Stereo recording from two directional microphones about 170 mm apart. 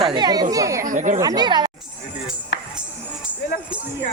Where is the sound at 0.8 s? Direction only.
50° right (ahead or behind).